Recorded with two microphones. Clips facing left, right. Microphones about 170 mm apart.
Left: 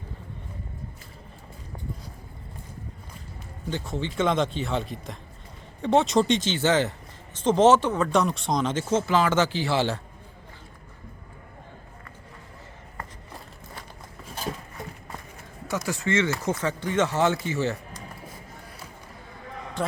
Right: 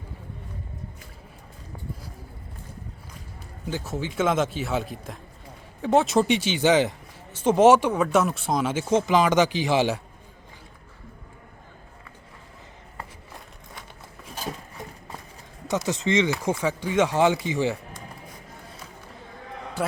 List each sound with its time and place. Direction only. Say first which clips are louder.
3.7 s a man's voice: even; 5° right (ahead or behind)
15.6 s speech: right 3 dB; 20° right (ahead or behind)